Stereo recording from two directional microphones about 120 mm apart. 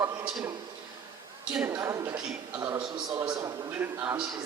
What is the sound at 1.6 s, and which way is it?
Speech, 25° right (ahead or behind).